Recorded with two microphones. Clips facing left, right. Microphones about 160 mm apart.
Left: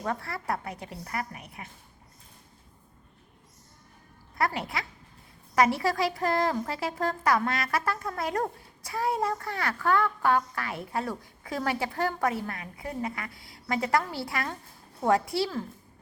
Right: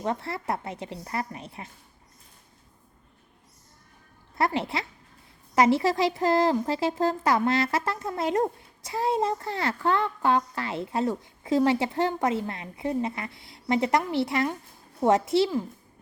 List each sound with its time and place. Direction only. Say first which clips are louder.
0.0 s a woman's voice: right 3 dB; 25° right (ahead or behind)
4.4 s a woman's voice: right 3 dB; 25° right (ahead or behind)